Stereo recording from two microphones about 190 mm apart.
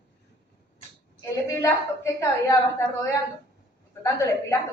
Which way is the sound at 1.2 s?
15° left (ahead or behind).